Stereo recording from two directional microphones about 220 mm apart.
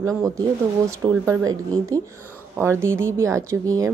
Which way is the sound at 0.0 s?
15° right (ahead or behind).